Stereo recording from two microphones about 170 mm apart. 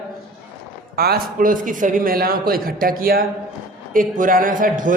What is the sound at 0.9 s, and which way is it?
A man's voice, 65° right (ahead or behind).